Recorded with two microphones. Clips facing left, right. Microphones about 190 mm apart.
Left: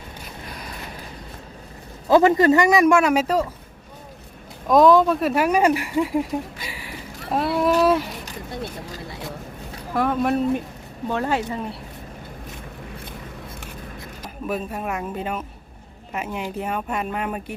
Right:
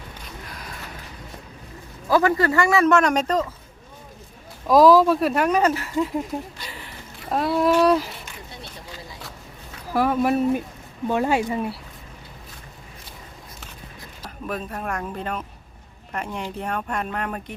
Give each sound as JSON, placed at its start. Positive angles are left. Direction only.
{"t": 2.0, "sound": "a man's voice", "side_deg": 20}
{"t": 4.7, "sound": "speech", "side_deg": 0}
{"t": 9.9, "sound": "speech", "side_deg": -5}
{"t": 14.2, "sound": "a man's voice", "side_deg": 5}